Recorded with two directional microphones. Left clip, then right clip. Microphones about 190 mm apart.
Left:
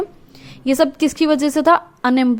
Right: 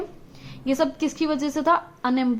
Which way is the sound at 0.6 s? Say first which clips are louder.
Left 7 dB; 35° left (ahead or behind).